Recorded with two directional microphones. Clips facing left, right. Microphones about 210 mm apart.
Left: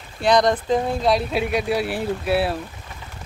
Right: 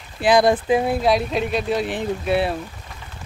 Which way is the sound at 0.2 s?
5° right (ahead or behind).